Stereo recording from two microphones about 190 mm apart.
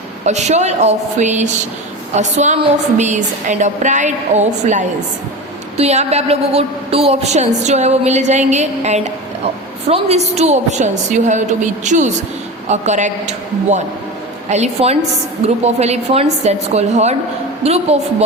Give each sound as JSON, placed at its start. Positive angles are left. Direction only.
{"t": 0.3, "sound": "a woman's voice", "side_deg": -35}